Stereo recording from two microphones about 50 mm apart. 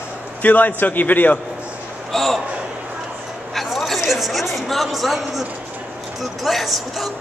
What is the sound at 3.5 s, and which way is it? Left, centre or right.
A woman's voice, centre.